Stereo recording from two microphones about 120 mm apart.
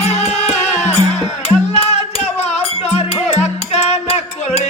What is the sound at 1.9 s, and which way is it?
Music, 60° left (ahead or behind).